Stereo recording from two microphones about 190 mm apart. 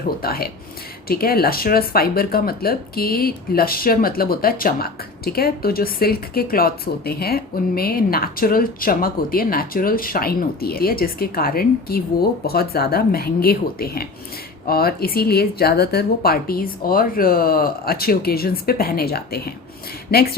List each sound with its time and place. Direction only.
0.2 s speech: 55° left (ahead or behind)